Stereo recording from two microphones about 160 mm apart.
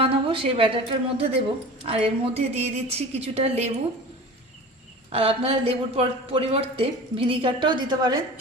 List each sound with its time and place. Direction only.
0.0 s a woman's voice: 35° right (ahead or behind)
5.1 s a woman's voice: 35° right (ahead or behind)